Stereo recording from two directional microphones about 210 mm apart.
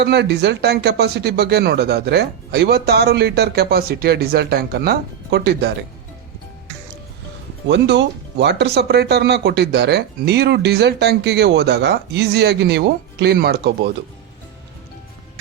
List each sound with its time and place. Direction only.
0.0 s speech: 55° right (ahead or behind)
7.7 s speech: 55° right (ahead or behind)